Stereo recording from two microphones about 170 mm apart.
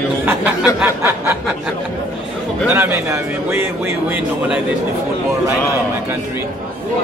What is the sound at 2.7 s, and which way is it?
Speech, 10° right (ahead or behind).